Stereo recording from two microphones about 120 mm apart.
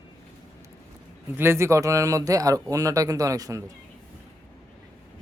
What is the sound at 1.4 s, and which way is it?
Speech, 20° right (ahead or behind).